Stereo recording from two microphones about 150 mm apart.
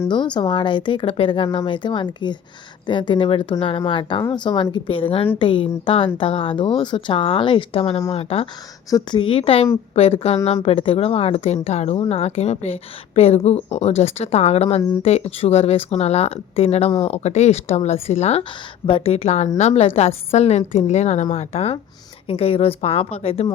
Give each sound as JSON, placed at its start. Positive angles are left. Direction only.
{"t": 0.1, "sound": "speech", "side_deg": 30}
{"t": 8.9, "sound": "a woman's voice", "side_deg": 25}